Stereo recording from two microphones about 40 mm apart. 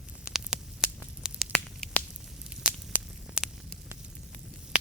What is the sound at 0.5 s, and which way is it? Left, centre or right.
Static, centre.